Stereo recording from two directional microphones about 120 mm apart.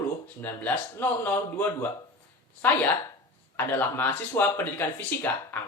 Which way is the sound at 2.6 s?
15° left (ahead or behind).